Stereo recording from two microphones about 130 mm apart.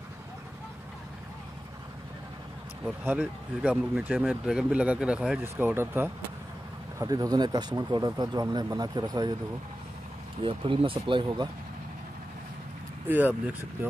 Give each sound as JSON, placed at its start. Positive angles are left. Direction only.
{"t": 3.0, "sound": "speech", "side_deg": -10}
{"t": 7.0, "sound": "speech", "side_deg": -30}
{"t": 10.4, "sound": "speech", "side_deg": -45}
{"t": 13.1, "sound": "speech", "side_deg": -15}